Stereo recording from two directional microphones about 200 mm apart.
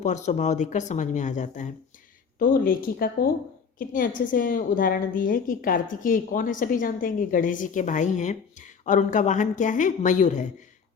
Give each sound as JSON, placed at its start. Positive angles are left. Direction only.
{"t": 0.0, "sound": "a woman's voice", "side_deg": 35}